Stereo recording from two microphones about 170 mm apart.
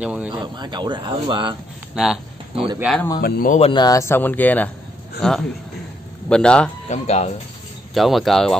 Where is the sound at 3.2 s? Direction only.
55° left (ahead or behind).